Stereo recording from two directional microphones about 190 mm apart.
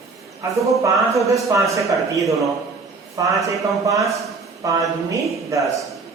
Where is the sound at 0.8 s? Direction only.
15° right (ahead or behind).